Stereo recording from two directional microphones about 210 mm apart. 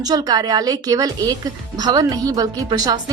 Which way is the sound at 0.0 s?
20° right (ahead or behind).